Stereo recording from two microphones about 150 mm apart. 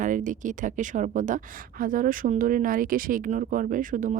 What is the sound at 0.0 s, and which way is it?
A woman's voice, 60° right (ahead or behind).